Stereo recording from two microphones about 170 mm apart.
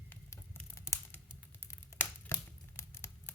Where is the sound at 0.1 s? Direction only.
10° left (ahead or behind).